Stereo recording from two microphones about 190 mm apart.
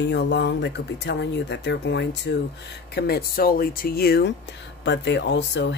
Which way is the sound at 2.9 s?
55° left (ahead or behind).